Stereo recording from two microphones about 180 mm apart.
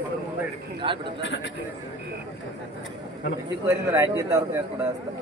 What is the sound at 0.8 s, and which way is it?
Speech, 30° right (ahead or behind).